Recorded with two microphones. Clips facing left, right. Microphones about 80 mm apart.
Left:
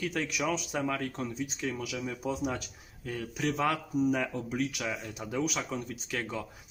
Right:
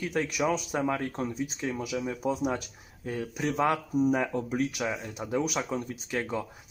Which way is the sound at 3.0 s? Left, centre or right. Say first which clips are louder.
Right 2 dB; right.